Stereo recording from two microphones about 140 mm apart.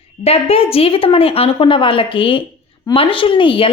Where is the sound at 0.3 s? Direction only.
45° left (ahead or behind).